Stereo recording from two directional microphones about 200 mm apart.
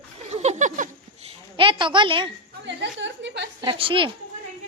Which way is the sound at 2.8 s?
60° right (ahead or behind).